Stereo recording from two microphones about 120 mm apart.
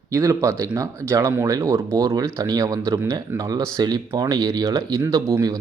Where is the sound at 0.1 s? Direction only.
30° right (ahead or behind).